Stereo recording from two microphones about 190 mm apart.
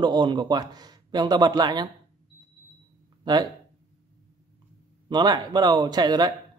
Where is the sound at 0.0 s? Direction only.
20° right (ahead or behind).